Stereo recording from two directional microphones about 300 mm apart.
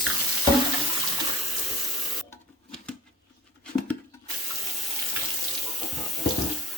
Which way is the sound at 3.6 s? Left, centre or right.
Centre.